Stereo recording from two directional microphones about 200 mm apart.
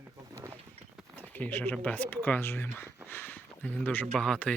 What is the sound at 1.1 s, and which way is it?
Speech, 10° left (ahead or behind).